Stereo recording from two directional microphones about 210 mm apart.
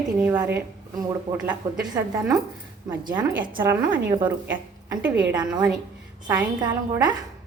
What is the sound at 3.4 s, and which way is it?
Speech, 20° right (ahead or behind).